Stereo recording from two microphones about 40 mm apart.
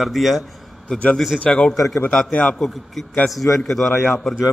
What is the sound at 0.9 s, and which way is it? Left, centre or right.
Speech, centre.